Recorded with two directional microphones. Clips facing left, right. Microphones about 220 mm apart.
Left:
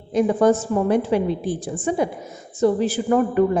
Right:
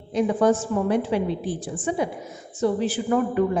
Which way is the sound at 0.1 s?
45° left (ahead or behind).